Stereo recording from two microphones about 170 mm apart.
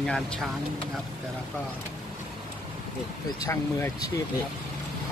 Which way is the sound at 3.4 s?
20° left (ahead or behind).